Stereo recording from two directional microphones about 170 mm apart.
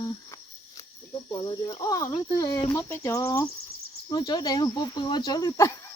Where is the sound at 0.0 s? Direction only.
25° left (ahead or behind).